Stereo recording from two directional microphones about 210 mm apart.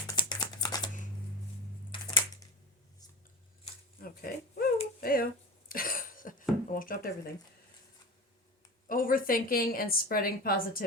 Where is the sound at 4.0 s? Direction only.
45° left (ahead or behind).